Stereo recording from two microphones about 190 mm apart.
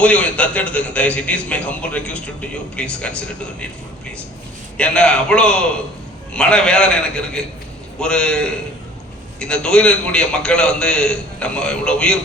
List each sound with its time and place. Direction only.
0.0 s a man's voice: 5° left (ahead or behind)
4.8 s a man's voice: 5° left (ahead or behind)